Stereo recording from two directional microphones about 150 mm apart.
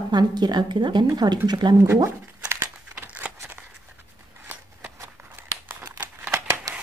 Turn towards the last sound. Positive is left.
turn(degrees=-20)  # may be behind; listen again after turning